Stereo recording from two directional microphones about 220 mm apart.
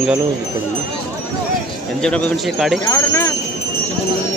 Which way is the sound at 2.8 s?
15° left (ahead or behind).